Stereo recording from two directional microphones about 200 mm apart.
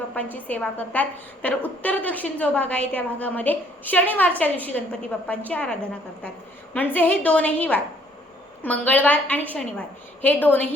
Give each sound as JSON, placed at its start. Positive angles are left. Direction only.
{"t": 0.1, "sound": "a woman's voice", "side_deg": 10}
{"t": 6.7, "sound": "a woman's voice", "side_deg": 10}